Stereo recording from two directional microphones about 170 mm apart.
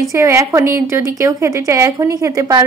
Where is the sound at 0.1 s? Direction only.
15° right (ahead or behind).